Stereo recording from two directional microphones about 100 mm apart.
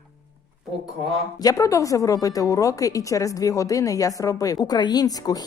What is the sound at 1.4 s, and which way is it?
A woman's voice, 35° left (ahead or behind).